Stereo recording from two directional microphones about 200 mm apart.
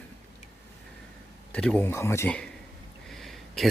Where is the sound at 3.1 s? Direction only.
Centre (ahead or behind).